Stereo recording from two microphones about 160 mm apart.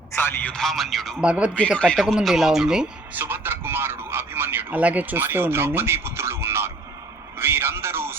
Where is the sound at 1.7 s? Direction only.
5° left (ahead or behind); by 6.9 s 15° right (ahead or behind).